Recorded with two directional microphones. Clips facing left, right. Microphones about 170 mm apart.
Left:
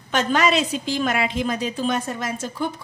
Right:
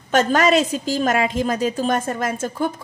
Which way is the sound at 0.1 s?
45° right (ahead or behind).